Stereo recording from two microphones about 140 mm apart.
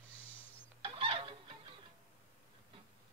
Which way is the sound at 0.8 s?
40° right (ahead or behind).